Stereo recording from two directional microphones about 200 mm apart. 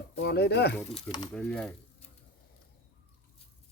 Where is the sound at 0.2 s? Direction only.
55° left (ahead or behind).